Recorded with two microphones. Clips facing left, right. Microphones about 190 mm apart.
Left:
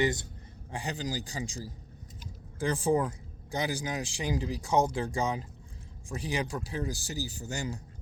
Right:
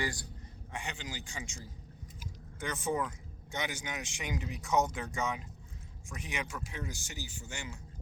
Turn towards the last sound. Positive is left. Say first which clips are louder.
# left 8 dB
turn(degrees=40)  # may be behind; listen again after turning